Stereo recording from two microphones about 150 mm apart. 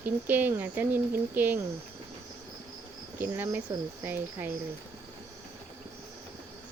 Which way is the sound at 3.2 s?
10° right (ahead or behind).